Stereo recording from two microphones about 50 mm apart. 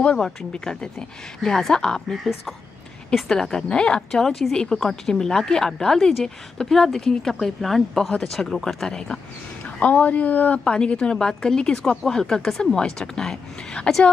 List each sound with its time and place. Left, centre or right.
0.2 s speech: centre
4.2 s speech: centre
8.9 s speech: centre
9.8 s speech: left
10.6 s speech: centre